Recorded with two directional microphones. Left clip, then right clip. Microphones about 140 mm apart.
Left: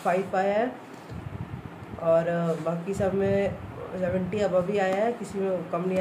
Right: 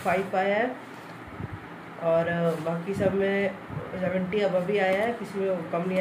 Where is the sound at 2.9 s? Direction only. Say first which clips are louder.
Even; 30° left (ahead or behind).